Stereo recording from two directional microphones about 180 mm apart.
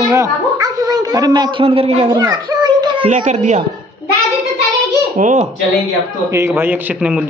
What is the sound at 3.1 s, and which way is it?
Speech, 40° right (ahead or behind).